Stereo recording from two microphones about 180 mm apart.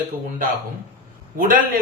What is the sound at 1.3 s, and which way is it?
Speech, 50° right (ahead or behind).